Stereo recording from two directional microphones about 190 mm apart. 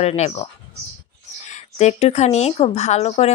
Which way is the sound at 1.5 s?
35° left (ahead or behind).